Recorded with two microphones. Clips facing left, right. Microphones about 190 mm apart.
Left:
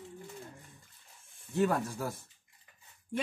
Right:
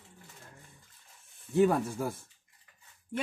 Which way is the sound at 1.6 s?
15° right (ahead or behind).